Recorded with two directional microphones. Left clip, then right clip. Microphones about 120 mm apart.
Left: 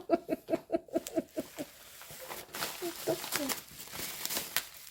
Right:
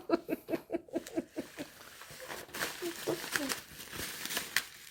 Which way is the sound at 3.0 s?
10° left (ahead or behind).